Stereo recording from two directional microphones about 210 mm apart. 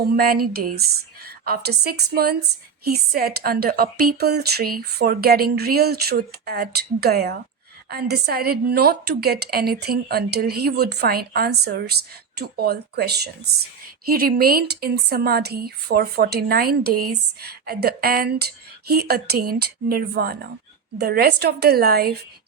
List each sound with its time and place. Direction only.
0.5 s a woman's voice: 45° right (ahead or behind)